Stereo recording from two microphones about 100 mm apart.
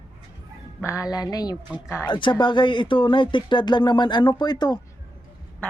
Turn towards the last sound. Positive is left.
turn(degrees=45)  # may be behind; listen again after turning